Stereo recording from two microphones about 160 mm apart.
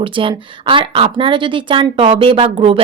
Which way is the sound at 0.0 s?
30° right (ahead or behind).